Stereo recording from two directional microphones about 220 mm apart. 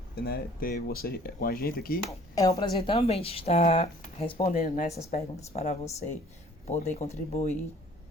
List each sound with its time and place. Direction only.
0.2 s speech: 45° left (ahead or behind)
2.5 s speech: 20° left (ahead or behind)